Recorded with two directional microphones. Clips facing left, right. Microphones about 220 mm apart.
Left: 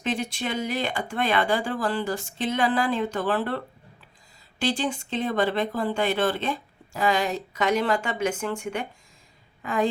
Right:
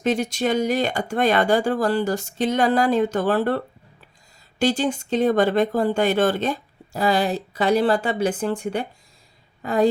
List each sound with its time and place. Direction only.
0.0 s speech: 40° right (ahead or behind)
4.6 s a woman's voice: 40° right (ahead or behind)